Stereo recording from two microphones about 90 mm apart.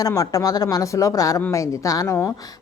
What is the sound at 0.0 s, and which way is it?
Speech, 45° left (ahead or behind).